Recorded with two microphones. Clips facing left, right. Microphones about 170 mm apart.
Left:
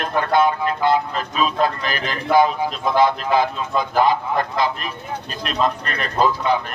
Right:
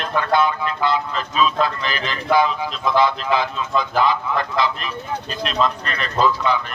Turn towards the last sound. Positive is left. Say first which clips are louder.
# even
turn(degrees=50)  # may be behind; listen again after turning